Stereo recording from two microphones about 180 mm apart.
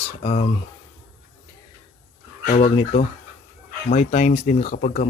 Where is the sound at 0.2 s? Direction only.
30° left (ahead or behind).